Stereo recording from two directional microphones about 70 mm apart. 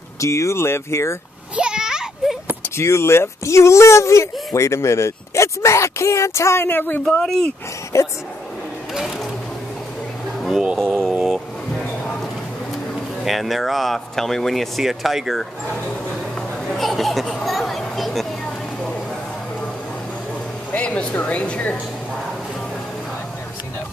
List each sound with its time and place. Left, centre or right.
0.2 s speech: left
1.6 s a sound: centre
2.8 s speech: left
7.2 s speech: centre
7.9 s speech: left
10.8 s speech: centre
11.2 s vehicle: centre
13.2 s speech: centre
16.6 s a sound: centre
20.7 s speech: centre